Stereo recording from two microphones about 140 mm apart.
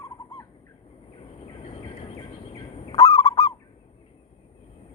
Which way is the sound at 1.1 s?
40° left (ahead or behind).